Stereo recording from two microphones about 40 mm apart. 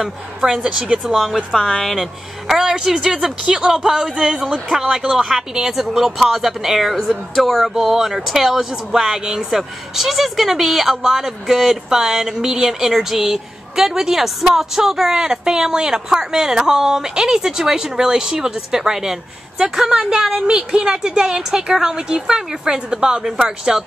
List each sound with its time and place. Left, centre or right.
0.4 s a woman's voice: right
1.3 s speech: centre
2.6 s a woman's voice: centre
7.7 s a woman's voice: centre